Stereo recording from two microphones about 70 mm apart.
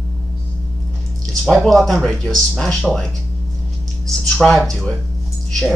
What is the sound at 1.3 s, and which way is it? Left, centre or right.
Speech, centre.